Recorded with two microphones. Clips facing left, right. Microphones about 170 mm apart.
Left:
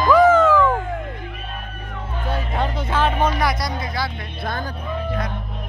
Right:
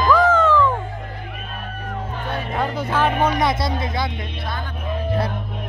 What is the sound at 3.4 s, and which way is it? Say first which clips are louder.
Speech: right 2 dB; 25° right (ahead or behind).